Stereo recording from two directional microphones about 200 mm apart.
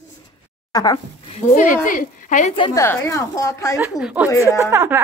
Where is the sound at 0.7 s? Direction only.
20° left (ahead or behind).